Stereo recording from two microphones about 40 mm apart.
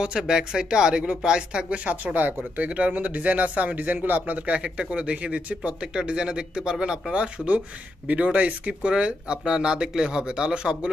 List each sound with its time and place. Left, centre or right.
0.0 s speech: centre
2.1 s speech: right
7.3 s speech: right
8.9 s speech: right